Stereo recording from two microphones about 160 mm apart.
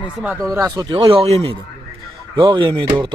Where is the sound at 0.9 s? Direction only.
35° right (ahead or behind).